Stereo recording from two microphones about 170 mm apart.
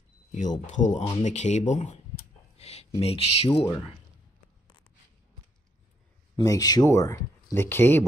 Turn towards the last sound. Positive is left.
turn(degrees=10)  # may be behind; listen again after turning